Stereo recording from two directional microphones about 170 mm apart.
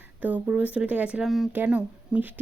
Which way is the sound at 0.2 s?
10° right (ahead or behind).